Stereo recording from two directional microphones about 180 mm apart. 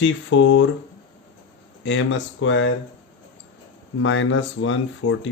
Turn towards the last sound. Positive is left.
turn(degrees=90)